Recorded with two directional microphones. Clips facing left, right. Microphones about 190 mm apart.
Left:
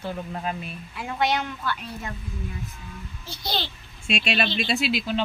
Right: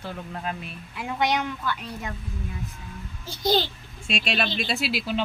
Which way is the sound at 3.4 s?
45° right (ahead or behind).